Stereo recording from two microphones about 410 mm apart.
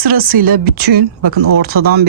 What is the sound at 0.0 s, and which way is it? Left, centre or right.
Speech, right.